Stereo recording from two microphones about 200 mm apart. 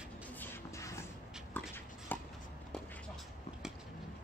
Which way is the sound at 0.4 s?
15° left (ahead or behind).